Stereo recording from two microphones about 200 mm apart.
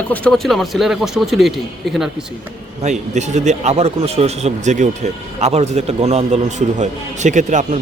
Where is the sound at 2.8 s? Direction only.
35° right (ahead or behind).